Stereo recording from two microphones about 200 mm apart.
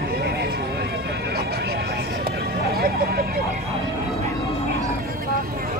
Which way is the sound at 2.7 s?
50° right (ahead or behind).